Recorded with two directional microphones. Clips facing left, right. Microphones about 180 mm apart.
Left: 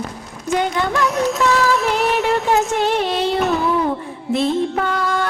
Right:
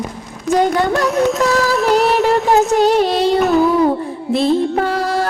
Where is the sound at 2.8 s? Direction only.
40° right (ahead or behind).